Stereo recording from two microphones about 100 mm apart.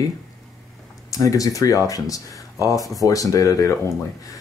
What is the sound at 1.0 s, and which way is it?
Speech, 35° left (ahead or behind).